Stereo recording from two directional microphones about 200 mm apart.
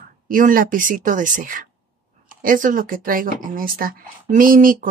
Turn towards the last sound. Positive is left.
turn(degrees=-45)  # may be behind; listen again after turning